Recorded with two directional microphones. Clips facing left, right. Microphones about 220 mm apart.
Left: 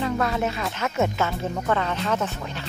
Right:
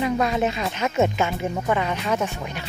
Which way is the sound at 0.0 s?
15° right (ahead or behind).